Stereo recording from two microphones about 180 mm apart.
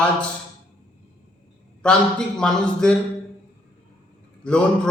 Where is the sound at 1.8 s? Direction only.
5° left (ahead or behind).